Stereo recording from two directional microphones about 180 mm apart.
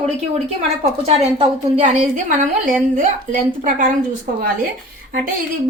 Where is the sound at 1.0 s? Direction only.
35° right (ahead or behind).